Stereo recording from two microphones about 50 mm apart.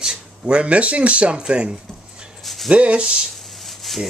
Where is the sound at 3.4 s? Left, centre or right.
Centre.